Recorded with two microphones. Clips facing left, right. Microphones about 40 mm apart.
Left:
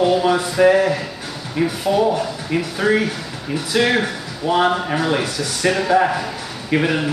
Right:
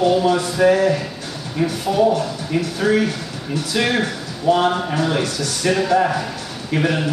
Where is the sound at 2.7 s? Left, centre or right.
Centre.